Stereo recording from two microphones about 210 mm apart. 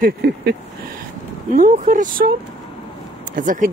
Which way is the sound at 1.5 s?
40° right (ahead or behind).